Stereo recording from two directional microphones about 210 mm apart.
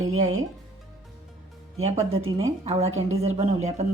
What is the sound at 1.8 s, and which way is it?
A woman's voice, 30° right (ahead or behind).